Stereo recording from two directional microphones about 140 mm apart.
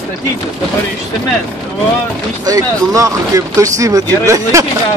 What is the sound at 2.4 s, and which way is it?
Speech, 25° right (ahead or behind).